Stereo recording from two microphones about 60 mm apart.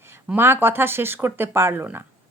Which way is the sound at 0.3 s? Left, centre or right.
Right.